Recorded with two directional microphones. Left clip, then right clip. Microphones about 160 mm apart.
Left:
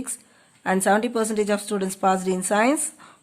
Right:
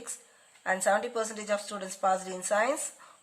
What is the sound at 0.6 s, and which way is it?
A woman's voice, 35° left (ahead or behind).